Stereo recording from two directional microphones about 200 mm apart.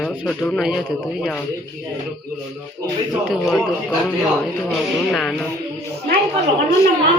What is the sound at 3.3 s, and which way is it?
Speech, centre (ahead or behind).